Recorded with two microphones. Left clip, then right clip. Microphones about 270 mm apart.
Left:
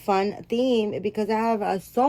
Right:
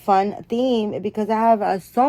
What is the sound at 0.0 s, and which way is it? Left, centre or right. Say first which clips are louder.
A woman's voice: right 5 dB; right.